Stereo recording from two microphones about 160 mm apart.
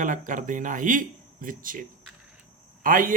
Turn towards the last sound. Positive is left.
turn(degrees=-60)  # may be behind; listen again after turning